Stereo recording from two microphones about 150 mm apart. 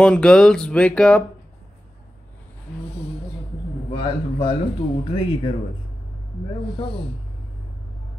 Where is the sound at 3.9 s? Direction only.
35° left (ahead or behind).